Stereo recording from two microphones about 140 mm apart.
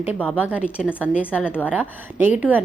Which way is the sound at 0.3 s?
10° right (ahead or behind).